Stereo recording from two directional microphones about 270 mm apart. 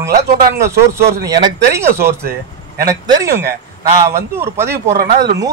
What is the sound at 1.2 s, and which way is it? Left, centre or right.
Speech, centre.